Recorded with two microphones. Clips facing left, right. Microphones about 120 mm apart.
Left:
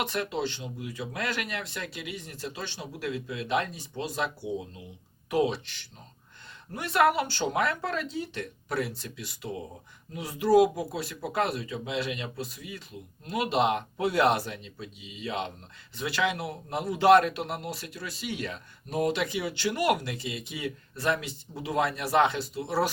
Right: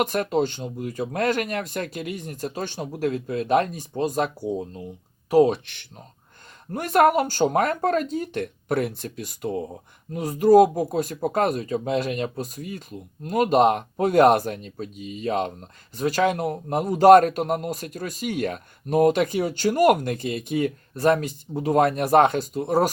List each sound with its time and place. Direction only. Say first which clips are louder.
0.0 s a man's voice: right 8 dB; 45° right (ahead or behind)
6.7 s a man's voice: right 6 dB; 50° right (ahead or behind)